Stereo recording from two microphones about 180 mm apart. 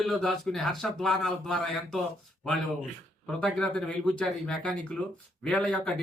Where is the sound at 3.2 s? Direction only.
5° left (ahead or behind).